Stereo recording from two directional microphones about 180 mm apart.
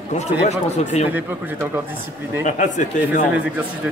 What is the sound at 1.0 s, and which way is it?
Speech, 10° right (ahead or behind).